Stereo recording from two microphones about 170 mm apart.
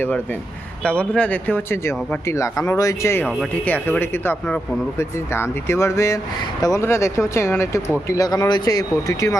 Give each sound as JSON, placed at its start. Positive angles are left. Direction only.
{"t": 0.9, "sound": "speech", "side_deg": 5}